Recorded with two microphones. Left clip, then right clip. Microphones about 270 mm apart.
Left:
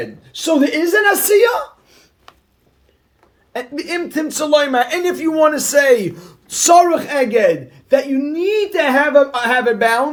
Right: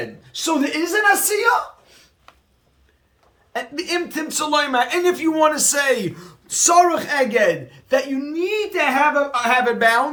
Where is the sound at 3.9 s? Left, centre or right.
Centre.